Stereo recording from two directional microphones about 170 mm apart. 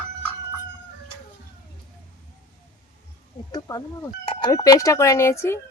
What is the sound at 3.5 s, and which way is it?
Speech, 25° left (ahead or behind).